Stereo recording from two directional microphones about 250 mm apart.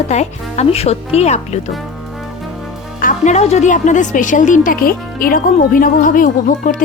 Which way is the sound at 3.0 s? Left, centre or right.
Left.